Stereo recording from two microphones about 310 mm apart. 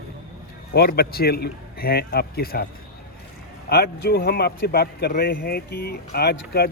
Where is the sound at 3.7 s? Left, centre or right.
Left.